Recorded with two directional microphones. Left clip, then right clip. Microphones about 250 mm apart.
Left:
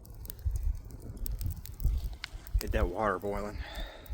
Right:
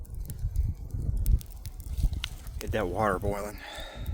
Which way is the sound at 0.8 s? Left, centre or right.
Centre.